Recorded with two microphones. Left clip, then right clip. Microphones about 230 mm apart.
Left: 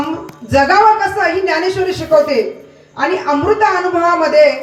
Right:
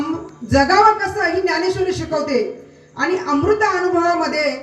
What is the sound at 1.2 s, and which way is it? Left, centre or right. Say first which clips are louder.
A man's voice: left 4 dB; right.